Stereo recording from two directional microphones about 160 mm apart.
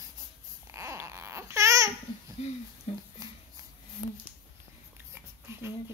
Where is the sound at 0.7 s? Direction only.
20° right (ahead or behind).